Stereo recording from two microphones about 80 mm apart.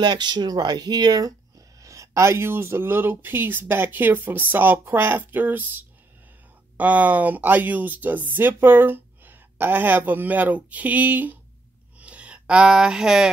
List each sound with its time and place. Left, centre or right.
0.0 s speech: right
1.8 s speech: right
12.0 s a sound: centre